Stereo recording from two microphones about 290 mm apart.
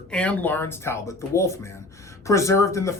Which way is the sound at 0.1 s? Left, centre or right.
Centre.